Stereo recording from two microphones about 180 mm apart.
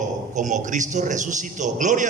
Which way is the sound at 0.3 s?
45° right (ahead or behind).